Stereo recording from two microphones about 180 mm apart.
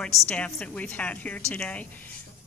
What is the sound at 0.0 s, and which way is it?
A woman's voice, 5° left (ahead or behind).